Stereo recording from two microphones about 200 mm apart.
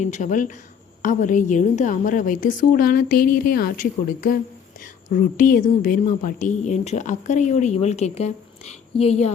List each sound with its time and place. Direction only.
0.0 s a woman's voice: 40° left (ahead or behind)